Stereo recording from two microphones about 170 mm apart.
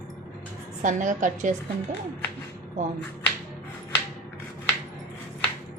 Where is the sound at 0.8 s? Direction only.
45° right (ahead or behind).